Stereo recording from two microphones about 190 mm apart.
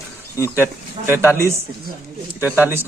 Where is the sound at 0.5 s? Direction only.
10° right (ahead or behind).